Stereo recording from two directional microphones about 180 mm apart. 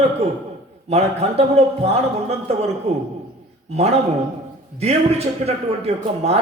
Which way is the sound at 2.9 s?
35° right (ahead or behind).